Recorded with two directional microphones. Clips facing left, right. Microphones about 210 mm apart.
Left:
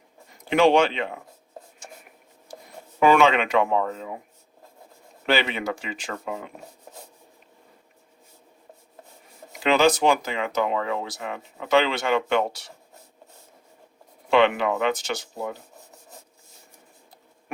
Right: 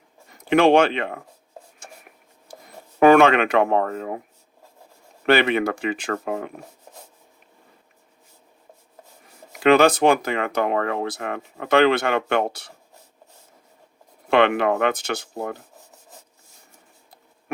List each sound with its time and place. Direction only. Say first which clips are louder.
0.5 s speech: right 3 dB; 55° right (ahead or behind)
3.0 s speech: right 4 dB; 55° right (ahead or behind)
5.2 s speech: right 6 dB; 55° right (ahead or behind)
9.6 s speech: right 4 dB; 55° right (ahead or behind)
14.3 s speech: right 2 dB; 55° right (ahead or behind)